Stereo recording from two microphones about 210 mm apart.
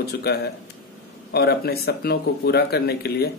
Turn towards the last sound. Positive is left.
turn(degrees=50)  # may be behind; listen again after turning